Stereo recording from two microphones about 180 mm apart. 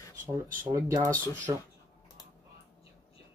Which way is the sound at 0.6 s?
15° right (ahead or behind).